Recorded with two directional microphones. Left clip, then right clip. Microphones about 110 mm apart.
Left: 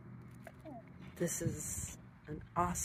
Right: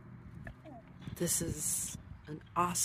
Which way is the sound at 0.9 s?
55° right (ahead or behind).